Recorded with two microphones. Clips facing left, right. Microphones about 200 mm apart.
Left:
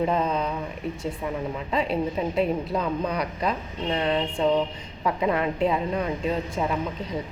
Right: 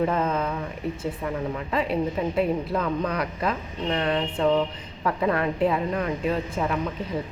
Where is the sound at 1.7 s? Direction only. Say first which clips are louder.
Even; 25° left (ahead or behind).